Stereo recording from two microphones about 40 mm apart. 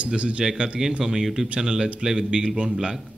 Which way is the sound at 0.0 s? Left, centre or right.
Right.